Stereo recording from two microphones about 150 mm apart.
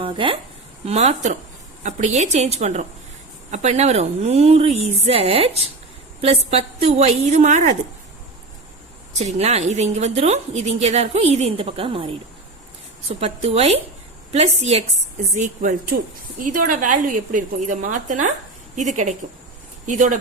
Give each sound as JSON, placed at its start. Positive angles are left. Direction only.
{"t": 0.0, "sound": "a woman's voice", "side_deg": -35}
{"t": 0.9, "sound": "a woman's voice", "side_deg": -50}
{"t": 9.1, "sound": "a woman's voice", "side_deg": -45}
{"t": 15.4, "sound": "a woman's voice", "side_deg": -60}